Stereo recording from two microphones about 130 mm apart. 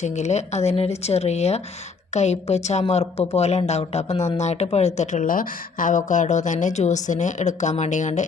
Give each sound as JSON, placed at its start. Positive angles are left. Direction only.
{"t": 0.0, "sound": "speech", "side_deg": 60}